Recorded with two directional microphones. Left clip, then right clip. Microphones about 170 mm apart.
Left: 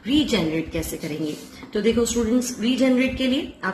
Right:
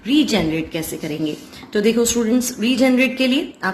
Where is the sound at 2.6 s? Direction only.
45° right (ahead or behind).